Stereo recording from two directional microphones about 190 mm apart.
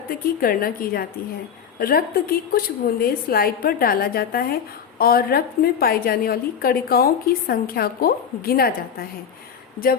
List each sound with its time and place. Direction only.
0.1 s a woman's voice: 50° left (ahead or behind)